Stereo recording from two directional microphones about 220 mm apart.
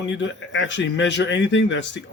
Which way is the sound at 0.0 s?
55° left (ahead or behind).